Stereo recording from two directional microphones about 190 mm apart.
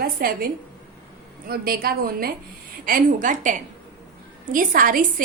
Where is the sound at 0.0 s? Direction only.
50° right (ahead or behind).